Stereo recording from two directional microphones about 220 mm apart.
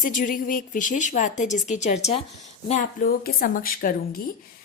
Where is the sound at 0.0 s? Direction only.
35° left (ahead or behind).